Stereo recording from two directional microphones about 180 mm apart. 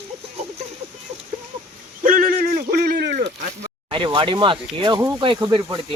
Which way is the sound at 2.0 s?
50° right (ahead or behind).